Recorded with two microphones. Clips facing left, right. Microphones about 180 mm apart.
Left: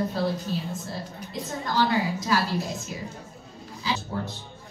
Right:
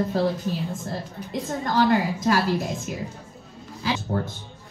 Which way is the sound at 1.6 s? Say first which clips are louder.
Right 4 dB; 50° right (ahead or behind).